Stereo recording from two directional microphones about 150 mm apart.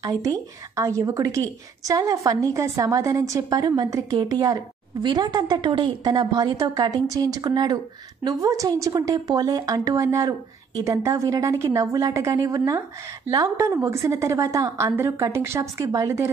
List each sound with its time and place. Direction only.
0.0 s a woman's voice: 25° right (ahead or behind)